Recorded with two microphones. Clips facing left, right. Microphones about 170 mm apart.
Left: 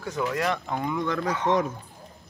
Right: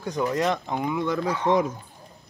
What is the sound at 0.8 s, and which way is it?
Speech, 10° right (ahead or behind).